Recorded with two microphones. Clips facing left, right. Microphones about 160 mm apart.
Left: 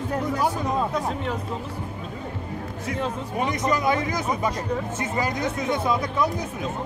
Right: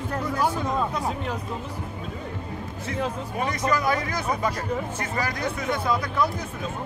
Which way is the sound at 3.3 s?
20° left (ahead or behind).